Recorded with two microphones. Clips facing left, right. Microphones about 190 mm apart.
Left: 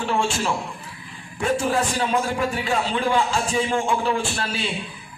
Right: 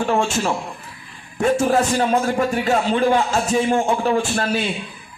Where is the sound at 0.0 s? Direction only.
45° right (ahead or behind).